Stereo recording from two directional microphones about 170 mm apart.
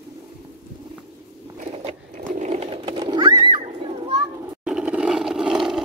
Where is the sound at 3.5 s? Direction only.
30° right (ahead or behind).